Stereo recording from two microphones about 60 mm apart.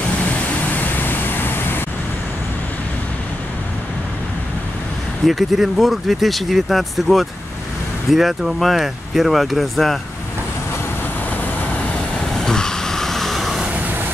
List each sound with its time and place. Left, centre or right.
0.2 s vehicle: left
5.2 s speech: centre
12.4 s vehicle: centre